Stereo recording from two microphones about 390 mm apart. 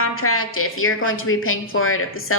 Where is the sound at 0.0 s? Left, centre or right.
Left.